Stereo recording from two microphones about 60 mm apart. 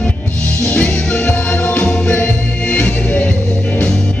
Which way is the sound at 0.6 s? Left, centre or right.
Left.